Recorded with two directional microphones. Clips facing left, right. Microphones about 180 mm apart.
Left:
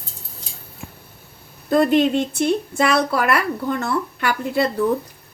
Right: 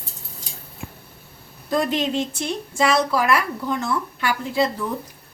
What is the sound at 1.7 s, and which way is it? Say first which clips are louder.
Speech: left 6 dB; 60° left (ahead or behind).